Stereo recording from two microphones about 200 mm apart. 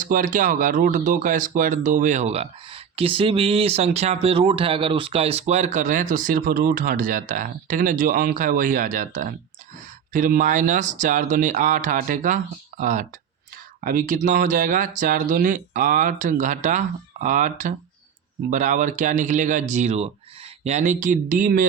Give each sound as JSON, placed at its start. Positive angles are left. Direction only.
{"t": 0.0, "sound": "speech", "side_deg": -40}